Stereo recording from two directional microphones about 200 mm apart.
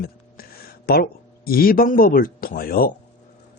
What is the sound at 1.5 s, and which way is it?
Speech, 45° left (ahead or behind).